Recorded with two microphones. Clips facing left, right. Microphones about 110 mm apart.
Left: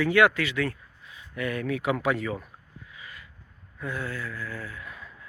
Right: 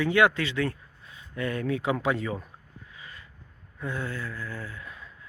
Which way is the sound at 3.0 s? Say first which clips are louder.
Left 1 dB; 30° right (ahead or behind).